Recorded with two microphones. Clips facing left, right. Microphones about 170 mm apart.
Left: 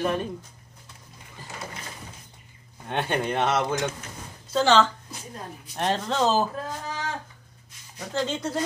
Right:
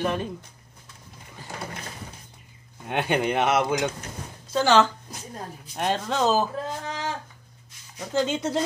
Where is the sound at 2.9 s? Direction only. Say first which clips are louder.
Right 2 dB; 15° right (ahead or behind).